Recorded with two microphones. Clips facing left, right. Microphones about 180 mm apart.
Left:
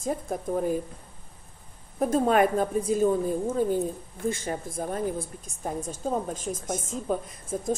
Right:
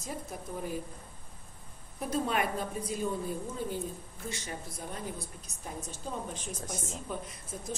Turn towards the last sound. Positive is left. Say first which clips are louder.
# left 8 dB
turn(degrees=45)  # may be behind; listen again after turning